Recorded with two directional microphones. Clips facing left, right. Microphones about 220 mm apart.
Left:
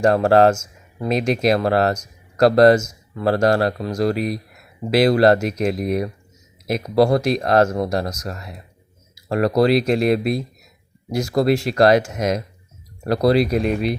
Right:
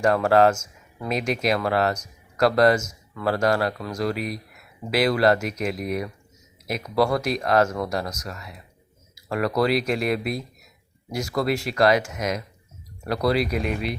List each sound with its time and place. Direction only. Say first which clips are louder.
0.0 s speech: left 4 dB; 35° left (ahead or behind)